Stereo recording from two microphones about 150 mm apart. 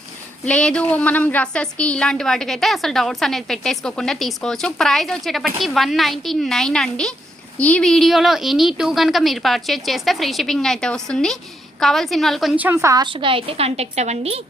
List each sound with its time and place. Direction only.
0.4 s a woman's voice: 5° left (ahead or behind)
12.6 s a woman's voice: 15° right (ahead or behind)
13.1 s a woman's voice: 35° right (ahead or behind)